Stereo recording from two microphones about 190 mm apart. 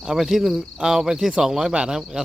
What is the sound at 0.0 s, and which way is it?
Speech, centre (ahead or behind).